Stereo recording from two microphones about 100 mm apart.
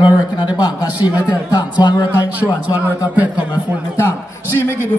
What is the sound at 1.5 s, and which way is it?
Speech, 50° left (ahead or behind).